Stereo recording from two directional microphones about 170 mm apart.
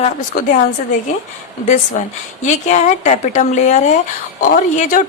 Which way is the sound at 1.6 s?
45° left (ahead or behind).